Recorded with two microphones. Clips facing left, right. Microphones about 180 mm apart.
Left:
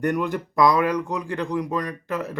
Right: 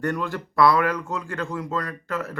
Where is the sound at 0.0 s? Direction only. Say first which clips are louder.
Left 3 dB; 15° left (ahead or behind).